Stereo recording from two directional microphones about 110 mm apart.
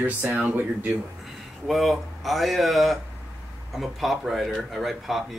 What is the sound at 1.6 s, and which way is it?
Speech, centre (ahead or behind).